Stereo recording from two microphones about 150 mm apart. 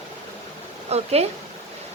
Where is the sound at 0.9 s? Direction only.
45° right (ahead or behind).